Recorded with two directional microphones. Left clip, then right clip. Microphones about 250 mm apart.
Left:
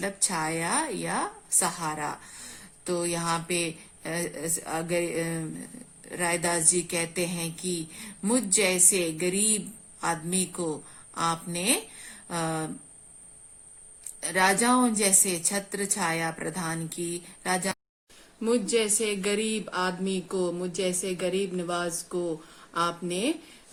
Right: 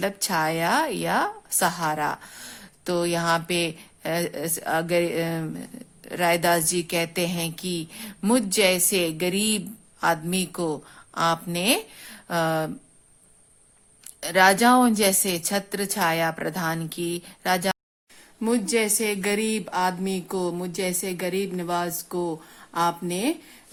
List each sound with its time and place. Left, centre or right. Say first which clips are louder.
0.0 s speech: right 5 dB; right
14.3 s speech: right 6 dB; right